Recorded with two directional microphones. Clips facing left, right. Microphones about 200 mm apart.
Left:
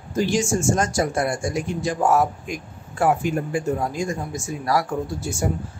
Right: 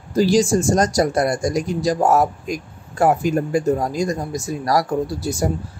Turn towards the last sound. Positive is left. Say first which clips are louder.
# right 4 dB
turn(degrees=-35)  # may be behind; listen again after turning